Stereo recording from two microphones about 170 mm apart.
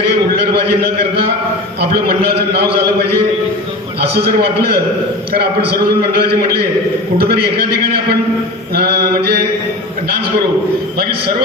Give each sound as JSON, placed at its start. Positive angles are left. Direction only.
{"t": 0.5, "sound": "a man's voice", "side_deg": -70}
{"t": 10.9, "sound": "a man's voice", "side_deg": -65}